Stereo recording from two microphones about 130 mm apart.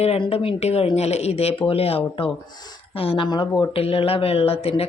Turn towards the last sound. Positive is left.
turn(degrees=50)  # may be behind; listen again after turning